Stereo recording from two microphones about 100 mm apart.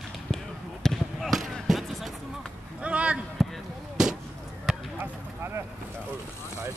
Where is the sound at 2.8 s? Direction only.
10° right (ahead or behind).